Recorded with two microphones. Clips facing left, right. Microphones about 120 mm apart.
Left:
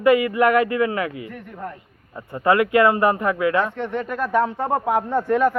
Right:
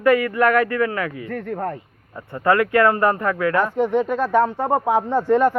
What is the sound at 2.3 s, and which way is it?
A man's voice, 15° left (ahead or behind).